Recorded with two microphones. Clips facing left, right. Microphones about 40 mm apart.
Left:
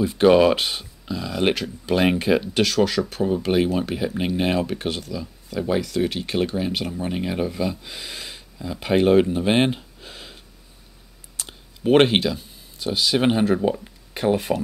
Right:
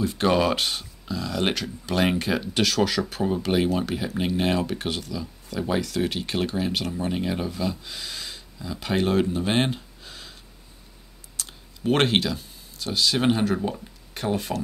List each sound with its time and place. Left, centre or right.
0.0 s speech: centre